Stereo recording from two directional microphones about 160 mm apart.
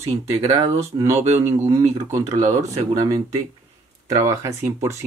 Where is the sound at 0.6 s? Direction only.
20° right (ahead or behind).